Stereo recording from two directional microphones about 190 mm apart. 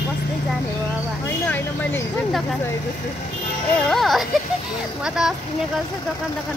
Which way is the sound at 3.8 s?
Centre (ahead or behind).